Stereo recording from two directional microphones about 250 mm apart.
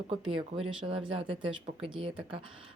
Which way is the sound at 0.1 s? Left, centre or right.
Right.